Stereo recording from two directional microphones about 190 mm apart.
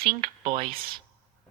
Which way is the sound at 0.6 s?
50° right (ahead or behind).